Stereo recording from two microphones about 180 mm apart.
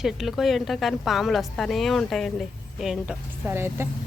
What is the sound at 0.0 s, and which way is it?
A woman's voice, centre (ahead or behind).